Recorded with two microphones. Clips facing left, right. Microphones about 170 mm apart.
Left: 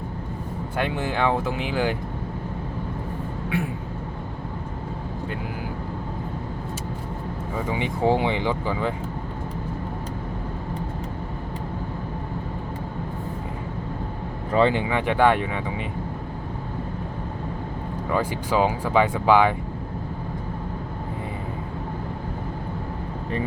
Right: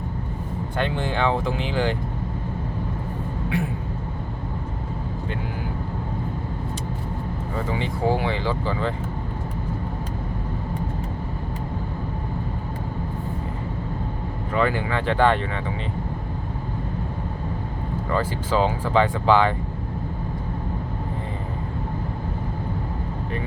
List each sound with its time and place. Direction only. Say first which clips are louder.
0.8 s speech: even; 10° left (ahead or behind)
7.5 s speech: left 1 dB; 10° left (ahead or behind)
14.5 s speech: left 3 dB; 25° left (ahead or behind)
18.1 s speech: even; 15° left (ahead or behind)